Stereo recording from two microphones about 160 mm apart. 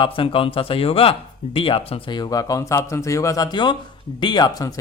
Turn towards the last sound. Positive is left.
turn(degrees=25)  # may be behind; listen again after turning